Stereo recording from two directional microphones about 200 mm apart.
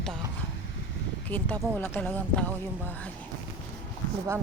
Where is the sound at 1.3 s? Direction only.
10° left (ahead or behind).